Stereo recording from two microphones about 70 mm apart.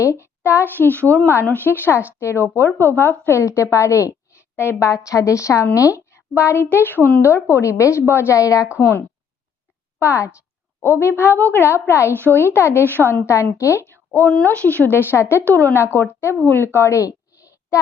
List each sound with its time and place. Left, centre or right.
0.0 s a woman's voice: left
7.2 s speech: left
8.4 s a woman's voice: left
10.0 s a woman's voice: left
13.3 s a woman's voice: left
17.1 s a sound: left